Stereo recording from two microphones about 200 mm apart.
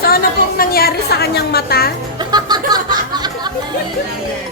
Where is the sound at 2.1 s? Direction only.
20° right (ahead or behind).